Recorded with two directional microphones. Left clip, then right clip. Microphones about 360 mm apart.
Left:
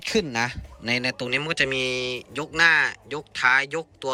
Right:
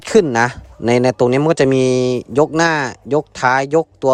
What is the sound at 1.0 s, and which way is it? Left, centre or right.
Speech, centre.